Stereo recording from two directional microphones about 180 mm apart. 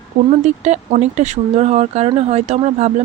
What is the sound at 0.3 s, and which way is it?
Speech, 40° right (ahead or behind).